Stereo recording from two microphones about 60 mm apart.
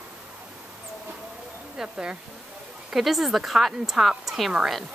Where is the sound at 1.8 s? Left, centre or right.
Centre.